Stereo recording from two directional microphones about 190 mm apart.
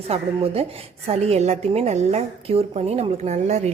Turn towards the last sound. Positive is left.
turn(degrees=-35)  # may be behind; listen again after turning